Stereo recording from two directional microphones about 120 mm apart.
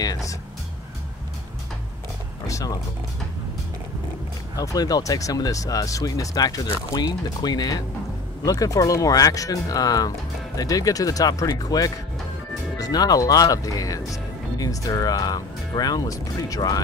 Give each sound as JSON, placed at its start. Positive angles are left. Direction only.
{"t": 0.0, "sound": "music", "side_deg": 30}
{"t": 2.4, "sound": "music", "side_deg": 30}
{"t": 4.6, "sound": "speech", "side_deg": 30}